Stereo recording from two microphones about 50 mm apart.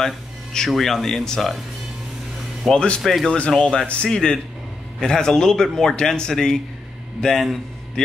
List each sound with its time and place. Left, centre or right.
0.0 s a sound: centre
0.7 s speech: centre
2.7 s a man's voice: centre
3.0 s speech: centre
3.4 s a man's voice: centre